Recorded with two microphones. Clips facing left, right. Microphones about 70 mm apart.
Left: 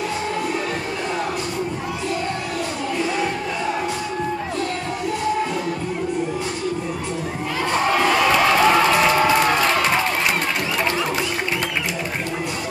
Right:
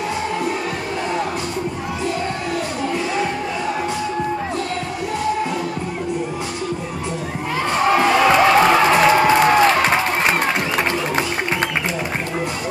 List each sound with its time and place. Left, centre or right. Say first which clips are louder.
7.9 s crowd: right 4 dB; right